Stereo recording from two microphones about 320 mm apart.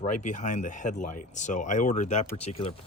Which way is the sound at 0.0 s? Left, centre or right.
Left.